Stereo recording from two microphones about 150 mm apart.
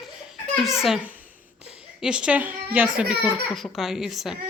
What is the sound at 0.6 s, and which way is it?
A woman's voice, centre (ahead or behind).